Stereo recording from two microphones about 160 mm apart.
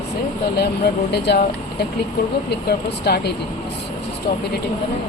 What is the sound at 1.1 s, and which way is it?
Speech, 90° left.